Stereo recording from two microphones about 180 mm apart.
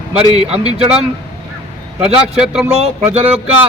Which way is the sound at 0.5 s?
35° right (ahead or behind).